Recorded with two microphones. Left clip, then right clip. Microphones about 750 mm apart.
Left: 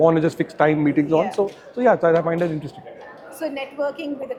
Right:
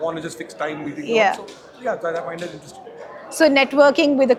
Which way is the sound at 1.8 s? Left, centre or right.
Left.